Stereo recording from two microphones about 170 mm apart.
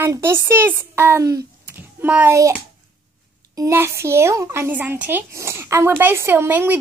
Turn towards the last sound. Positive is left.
turn(degrees=-15)  # may be behind; listen again after turning